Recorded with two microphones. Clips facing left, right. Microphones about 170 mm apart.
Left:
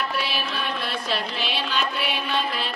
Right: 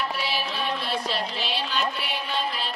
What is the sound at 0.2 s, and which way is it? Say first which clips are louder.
Music: even; 60° left (ahead or behind).